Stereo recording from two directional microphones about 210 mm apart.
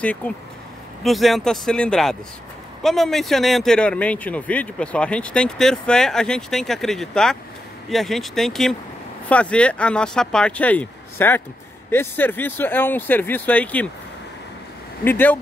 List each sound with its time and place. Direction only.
0.0 s speech: 5° left (ahead or behind)
15.0 s speech: 10° left (ahead or behind)